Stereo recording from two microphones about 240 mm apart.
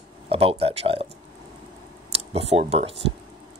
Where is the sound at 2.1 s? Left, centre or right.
Right.